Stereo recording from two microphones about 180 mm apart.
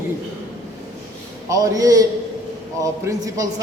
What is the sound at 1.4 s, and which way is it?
A man's voice, 20° right (ahead or behind).